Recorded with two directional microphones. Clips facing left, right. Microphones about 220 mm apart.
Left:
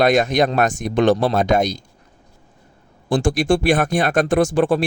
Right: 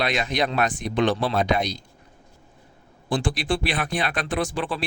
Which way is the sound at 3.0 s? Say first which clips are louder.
Left 7 dB; 45° left (ahead or behind).